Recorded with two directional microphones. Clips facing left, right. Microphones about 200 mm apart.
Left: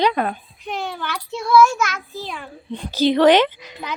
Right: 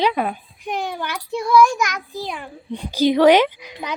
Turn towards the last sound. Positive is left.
turn(degrees=-10)  # may be behind; listen again after turning